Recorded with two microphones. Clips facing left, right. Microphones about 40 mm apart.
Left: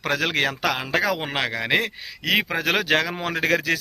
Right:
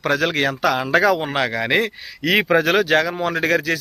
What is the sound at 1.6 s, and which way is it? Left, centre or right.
Speech, centre.